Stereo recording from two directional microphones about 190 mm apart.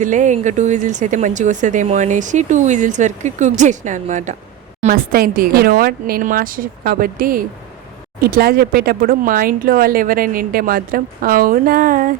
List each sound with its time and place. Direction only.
0.0 s speech: 40° right (ahead or behind)